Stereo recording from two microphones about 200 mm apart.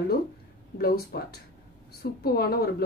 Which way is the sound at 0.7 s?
50° left (ahead or behind).